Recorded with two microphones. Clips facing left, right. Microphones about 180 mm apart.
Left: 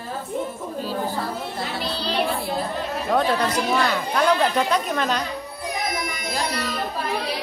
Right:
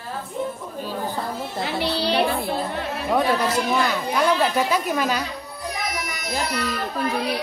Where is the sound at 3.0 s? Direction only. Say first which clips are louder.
Right 1 dB; 15° right (ahead or behind).